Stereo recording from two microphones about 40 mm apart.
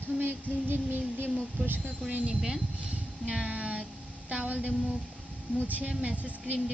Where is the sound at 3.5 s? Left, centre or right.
Right.